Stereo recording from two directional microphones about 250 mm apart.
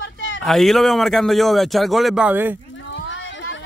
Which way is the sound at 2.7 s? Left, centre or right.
Left.